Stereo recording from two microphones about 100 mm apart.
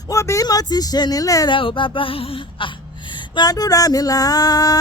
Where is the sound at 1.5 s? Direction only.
60° left (ahead or behind).